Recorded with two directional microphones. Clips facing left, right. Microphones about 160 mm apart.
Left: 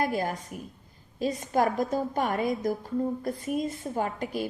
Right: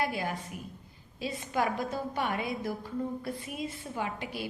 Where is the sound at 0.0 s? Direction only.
45° left (ahead or behind).